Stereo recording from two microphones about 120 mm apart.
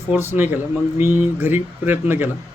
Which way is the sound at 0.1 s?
20° right (ahead or behind).